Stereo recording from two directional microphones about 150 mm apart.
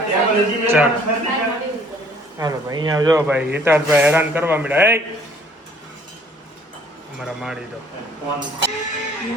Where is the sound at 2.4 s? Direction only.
25° right (ahead or behind).